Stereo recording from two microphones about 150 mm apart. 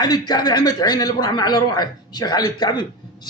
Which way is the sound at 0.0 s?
25° left (ahead or behind).